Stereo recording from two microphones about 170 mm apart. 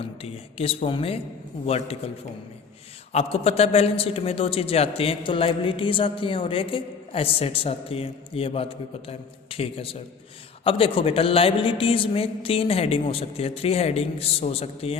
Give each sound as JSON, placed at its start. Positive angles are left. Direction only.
{"t": 0.0, "sound": "a man's voice", "side_deg": 35}
{"t": 3.1, "sound": "a man's voice", "side_deg": 35}